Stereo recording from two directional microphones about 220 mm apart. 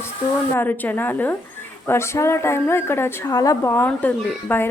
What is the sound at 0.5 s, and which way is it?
A woman's voice, 10° left (ahead or behind).